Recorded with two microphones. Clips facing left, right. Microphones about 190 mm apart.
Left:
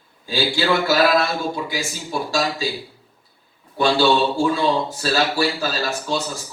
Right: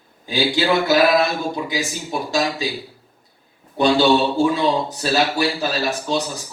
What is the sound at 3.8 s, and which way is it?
A man's voice, 20° right (ahead or behind).